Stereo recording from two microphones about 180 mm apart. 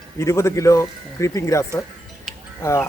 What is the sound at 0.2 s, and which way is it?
A man's voice, 15° left (ahead or behind).